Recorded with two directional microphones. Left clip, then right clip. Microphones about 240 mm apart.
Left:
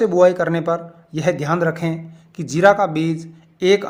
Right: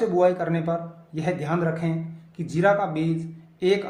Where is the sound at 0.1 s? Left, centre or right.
Left.